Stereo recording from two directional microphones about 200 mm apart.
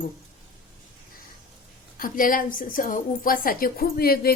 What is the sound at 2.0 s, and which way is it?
A woman's voice, 45° left (ahead or behind).